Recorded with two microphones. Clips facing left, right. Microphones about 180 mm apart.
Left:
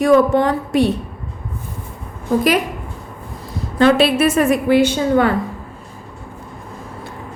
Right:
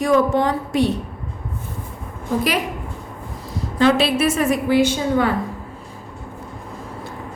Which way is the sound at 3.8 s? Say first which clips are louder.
Left 3 dB; 55° left (ahead or behind).